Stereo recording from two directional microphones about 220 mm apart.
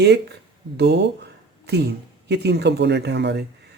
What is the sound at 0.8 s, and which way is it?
Speech, 50° right (ahead or behind).